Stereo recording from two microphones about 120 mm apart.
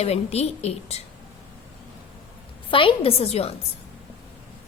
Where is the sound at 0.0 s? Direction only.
60° left (ahead or behind).